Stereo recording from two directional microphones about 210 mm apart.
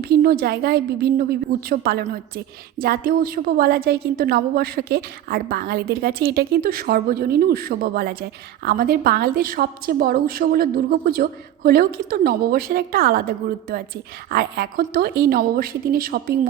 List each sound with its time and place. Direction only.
0.0 s a woman's voice: 45° right (ahead or behind)